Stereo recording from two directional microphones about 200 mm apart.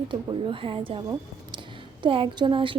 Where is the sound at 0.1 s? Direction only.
25° right (ahead or behind).